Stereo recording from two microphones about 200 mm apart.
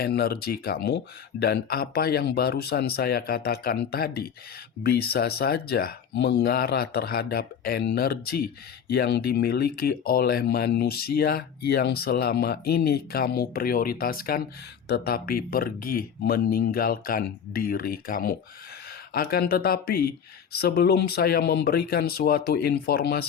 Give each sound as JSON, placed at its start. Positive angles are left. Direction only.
{"t": 0.0, "sound": "speech", "side_deg": 50}